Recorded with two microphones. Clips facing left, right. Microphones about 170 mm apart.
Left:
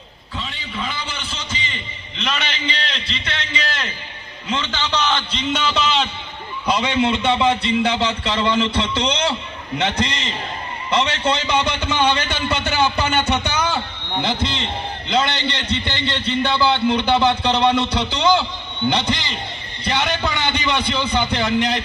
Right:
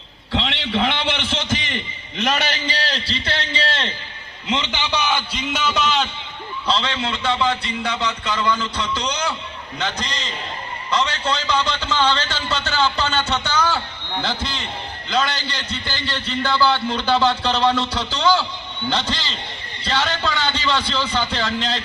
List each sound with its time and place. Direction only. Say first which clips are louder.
0.3 s a man's voice: right 8 dB; 75° right (ahead or behind); by 3.9 s 30° right (ahead or behind)
4.4 s a man's voice: even; 15° right (ahead or behind); by 6.1 s centre (ahead or behind)
6.7 s a man's voice: left 5 dB; 15° left (ahead or behind)